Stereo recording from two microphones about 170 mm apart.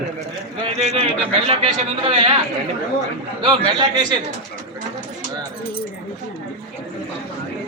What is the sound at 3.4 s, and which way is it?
Speech, 25° right (ahead or behind).